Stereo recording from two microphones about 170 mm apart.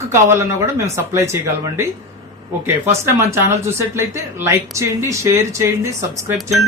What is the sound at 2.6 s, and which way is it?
Speech, 15° right (ahead or behind).